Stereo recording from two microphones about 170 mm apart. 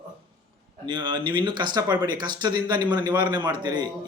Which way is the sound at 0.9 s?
30° right (ahead or behind).